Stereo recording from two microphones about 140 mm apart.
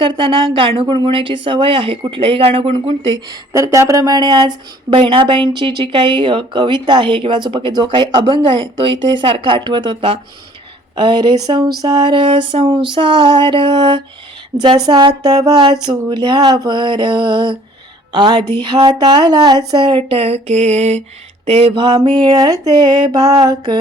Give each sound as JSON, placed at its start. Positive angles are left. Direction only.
{"t": 0.0, "sound": "speech", "side_deg": -35}
{"t": 3.5, "sound": "speech", "side_deg": -20}